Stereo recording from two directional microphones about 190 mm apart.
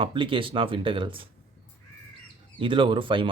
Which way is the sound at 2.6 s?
25° right (ahead or behind).